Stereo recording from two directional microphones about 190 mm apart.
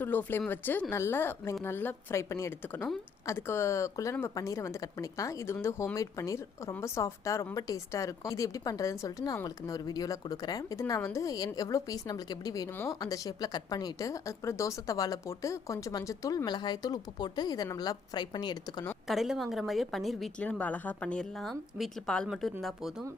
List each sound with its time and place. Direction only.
0.0 s speech: 10° left (ahead or behind)
19.0 s a woman's voice: centre (ahead or behind)